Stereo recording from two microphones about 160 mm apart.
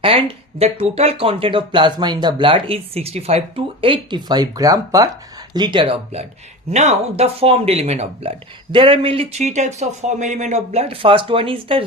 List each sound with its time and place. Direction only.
0.0 s speech: 35° right (ahead or behind)